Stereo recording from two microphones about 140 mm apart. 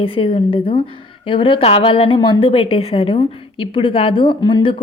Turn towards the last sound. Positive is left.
turn(degrees=35)  # may be behind; listen again after turning